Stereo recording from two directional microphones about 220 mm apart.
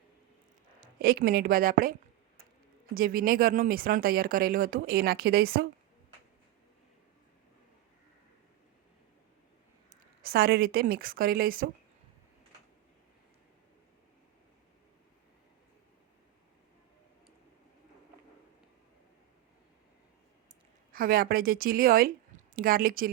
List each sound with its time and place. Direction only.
0.8 s speech: 45° right (ahead or behind)
9.9 s a woman's voice: 45° right (ahead or behind)
20.9 s a woman's voice: 40° right (ahead or behind)